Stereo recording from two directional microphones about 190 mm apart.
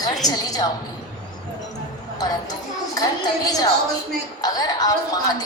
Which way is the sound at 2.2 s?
20° left (ahead or behind).